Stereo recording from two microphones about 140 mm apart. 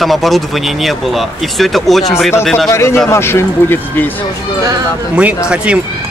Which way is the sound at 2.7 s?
20° left (ahead or behind).